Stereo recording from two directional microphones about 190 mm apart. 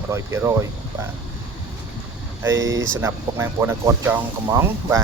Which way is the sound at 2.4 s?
80° right.